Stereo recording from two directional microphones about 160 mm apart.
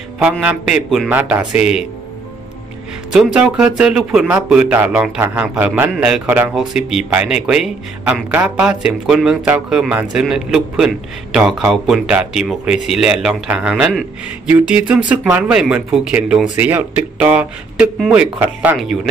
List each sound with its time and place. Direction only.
0.2 s a man's voice: 10° right (ahead or behind)
3.1 s a man's voice: 5° right (ahead or behind)